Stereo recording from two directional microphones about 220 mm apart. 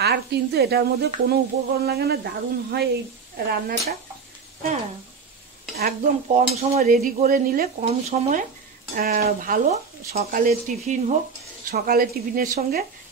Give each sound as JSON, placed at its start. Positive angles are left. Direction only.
{"t": 0.0, "sound": "speech", "side_deg": -50}
{"t": 5.8, "sound": "speech", "side_deg": -40}
{"t": 6.5, "sound": "speech", "side_deg": -30}